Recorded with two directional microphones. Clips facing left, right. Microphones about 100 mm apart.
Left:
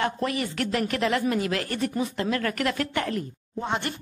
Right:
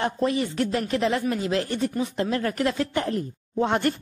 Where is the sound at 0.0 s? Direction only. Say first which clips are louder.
Right 3 dB; 25° right (ahead or behind).